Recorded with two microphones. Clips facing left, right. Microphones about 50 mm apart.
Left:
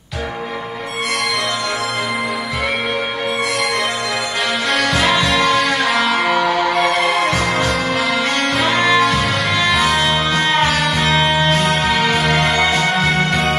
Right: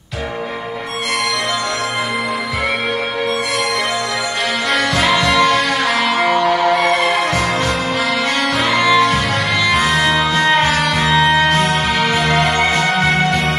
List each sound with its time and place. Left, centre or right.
5.1 s music: right
6.7 s music: centre
8.8 s music: centre
11.4 s music: right